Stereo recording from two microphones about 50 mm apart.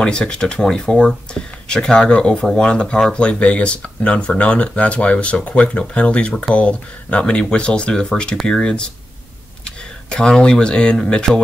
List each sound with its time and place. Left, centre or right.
0.0 s speech: centre